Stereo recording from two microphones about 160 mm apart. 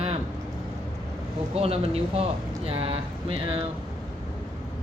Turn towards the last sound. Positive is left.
turn(degrees=-35)  # may be behind; listen again after turning